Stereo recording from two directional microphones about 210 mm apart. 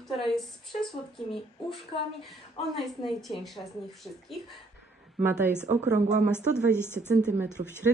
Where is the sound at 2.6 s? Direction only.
30° left (ahead or behind).